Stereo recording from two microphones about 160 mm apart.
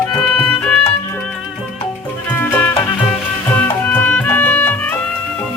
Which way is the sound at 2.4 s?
10° left (ahead or behind).